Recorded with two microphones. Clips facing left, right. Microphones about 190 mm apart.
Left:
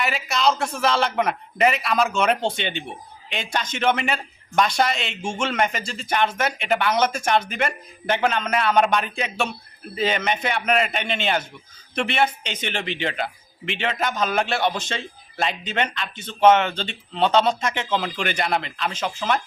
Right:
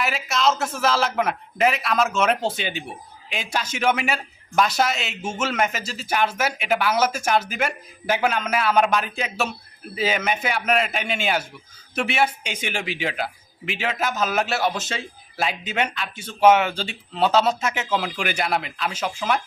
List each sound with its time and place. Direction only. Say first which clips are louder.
0.0 s a man's voice: even; centre (ahead or behind)